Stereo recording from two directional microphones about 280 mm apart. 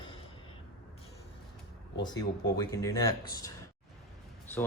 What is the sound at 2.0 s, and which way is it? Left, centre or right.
Speech, centre.